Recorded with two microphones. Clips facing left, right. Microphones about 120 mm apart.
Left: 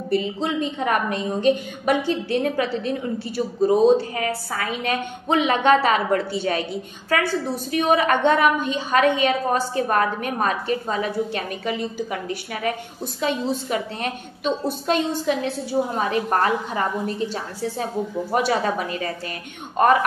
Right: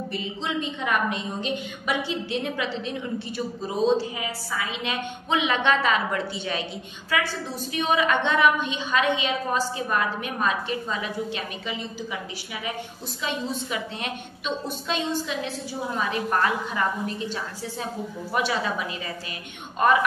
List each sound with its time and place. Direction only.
0.1 s a woman's voice: 40° left (ahead or behind)
13.2 s a woman's voice: 45° left (ahead or behind)